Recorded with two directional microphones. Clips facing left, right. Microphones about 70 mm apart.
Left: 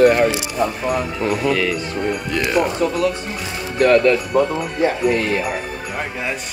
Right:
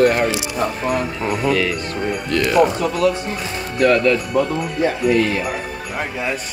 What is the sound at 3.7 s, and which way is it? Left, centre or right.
Speech, left.